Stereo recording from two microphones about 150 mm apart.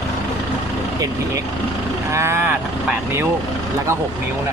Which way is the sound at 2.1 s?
15° right (ahead or behind).